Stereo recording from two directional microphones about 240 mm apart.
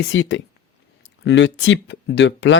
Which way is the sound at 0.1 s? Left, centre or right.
Left.